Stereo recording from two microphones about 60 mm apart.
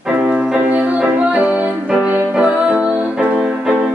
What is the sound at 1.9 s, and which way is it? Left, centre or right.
Music, centre.